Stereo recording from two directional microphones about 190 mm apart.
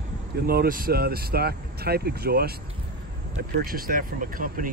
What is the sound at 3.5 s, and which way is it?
Speech, 50° right (ahead or behind).